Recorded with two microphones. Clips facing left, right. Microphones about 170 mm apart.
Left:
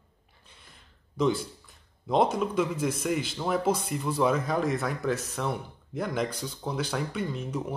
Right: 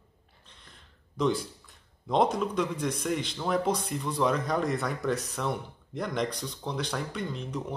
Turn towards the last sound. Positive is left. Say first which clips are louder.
# left 2 dB
turn(degrees=5)  # may be behind; listen again after turning